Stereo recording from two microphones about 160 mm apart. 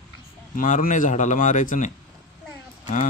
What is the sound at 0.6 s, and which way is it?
A man's voice, 55° left (ahead or behind).